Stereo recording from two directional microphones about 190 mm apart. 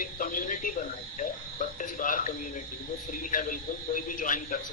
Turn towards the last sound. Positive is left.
turn(degrees=45)  # may be behind; listen again after turning